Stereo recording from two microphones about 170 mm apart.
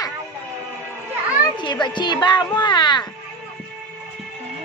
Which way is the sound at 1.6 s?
25° left (ahead or behind).